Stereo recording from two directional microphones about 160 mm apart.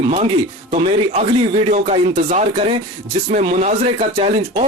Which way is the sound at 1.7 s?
45° right (ahead or behind).